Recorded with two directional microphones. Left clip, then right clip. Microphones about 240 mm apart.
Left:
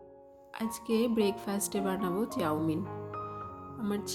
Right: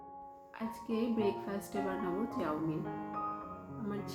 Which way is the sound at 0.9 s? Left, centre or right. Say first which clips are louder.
Left 5 dB; left.